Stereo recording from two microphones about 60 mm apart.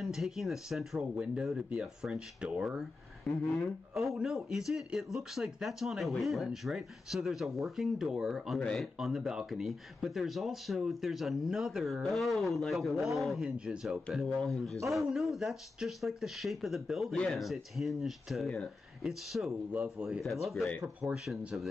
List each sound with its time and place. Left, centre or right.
0.0 s speech: centre
1.1 s speech: right
3.3 s speech: centre
8.5 s speech: centre
8.9 s speech: centre
14.2 s speech: centre
14.9 s speech: centre
19.7 s speech: right
20.1 s speech: centre